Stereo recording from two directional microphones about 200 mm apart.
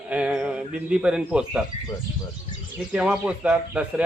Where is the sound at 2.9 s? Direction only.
5° right (ahead or behind).